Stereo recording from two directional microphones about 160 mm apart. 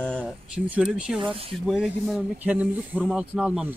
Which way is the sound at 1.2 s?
35° right (ahead or behind).